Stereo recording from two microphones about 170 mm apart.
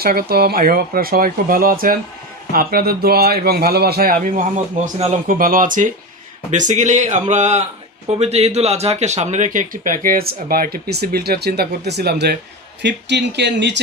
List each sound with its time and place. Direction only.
0.0 s speech: 60° right (ahead or behind); by 5.1 s 40° right (ahead or behind)
5.3 s speech: 55° right (ahead or behind); by 12.4 s 75° right (ahead or behind)
12.8 s speech: 90° right